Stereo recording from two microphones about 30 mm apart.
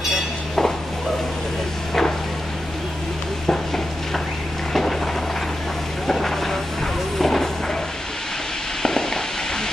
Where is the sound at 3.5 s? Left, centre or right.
Centre.